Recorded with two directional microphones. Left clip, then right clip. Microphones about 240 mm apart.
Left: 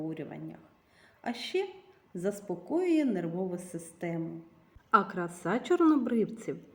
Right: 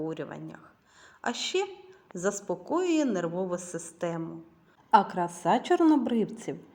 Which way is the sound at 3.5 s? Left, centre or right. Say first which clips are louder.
Right 6 dB; centre.